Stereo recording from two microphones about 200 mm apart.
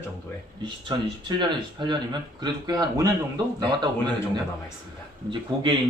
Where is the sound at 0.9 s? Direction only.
20° right (ahead or behind).